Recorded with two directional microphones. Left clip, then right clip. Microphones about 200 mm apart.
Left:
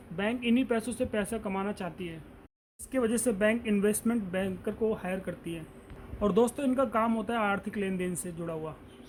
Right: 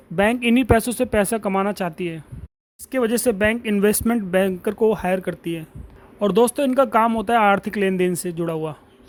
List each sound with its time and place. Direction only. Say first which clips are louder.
0.2 s speech: right 11 dB; 50° right (ahead or behind)